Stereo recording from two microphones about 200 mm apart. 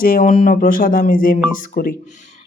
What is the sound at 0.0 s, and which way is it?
Speech, 40° left (ahead or behind).